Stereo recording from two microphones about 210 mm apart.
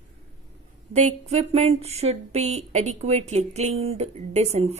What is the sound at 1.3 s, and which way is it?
A woman's voice, 30° right (ahead or behind).